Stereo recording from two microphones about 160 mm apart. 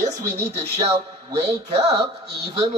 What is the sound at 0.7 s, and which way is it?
Speech, 40° right (ahead or behind).